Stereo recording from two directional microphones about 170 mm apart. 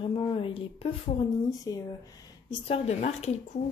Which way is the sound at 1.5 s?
20° left (ahead or behind).